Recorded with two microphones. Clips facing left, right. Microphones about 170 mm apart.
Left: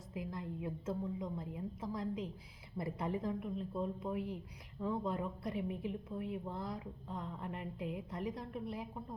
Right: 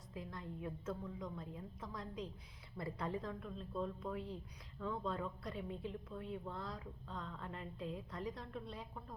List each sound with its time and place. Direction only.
0.1 s a woman's voice: 25° left (ahead or behind)